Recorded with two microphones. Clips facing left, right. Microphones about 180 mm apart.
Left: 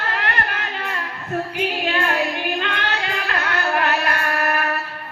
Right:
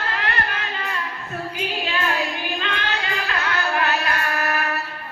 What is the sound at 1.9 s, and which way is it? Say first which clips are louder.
Female singing: left 2 dB; 55° left (ahead or behind).